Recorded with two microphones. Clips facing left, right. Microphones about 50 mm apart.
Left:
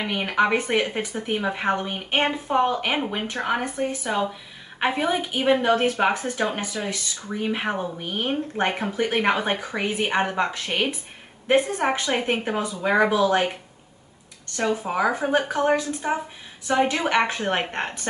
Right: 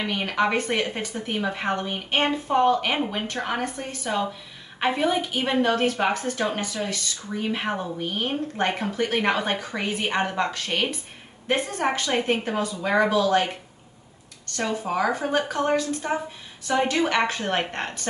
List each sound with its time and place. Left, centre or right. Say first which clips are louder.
0.0 s a woman's voice: left 2 dB; centre
14.6 s a woman's voice: left 2 dB; left